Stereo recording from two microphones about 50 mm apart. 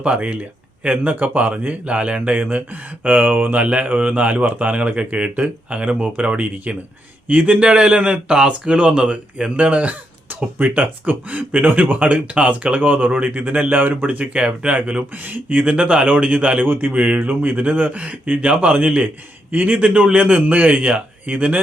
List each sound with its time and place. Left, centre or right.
0.0 s speech: right
16.6 s speech: right
16.9 s speech: right
17.2 s speech: right